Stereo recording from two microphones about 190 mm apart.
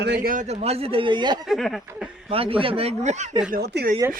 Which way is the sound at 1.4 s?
Centre (ahead or behind).